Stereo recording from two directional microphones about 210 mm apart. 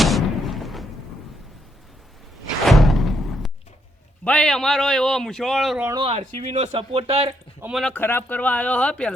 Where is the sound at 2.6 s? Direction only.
Centre (ahead or behind).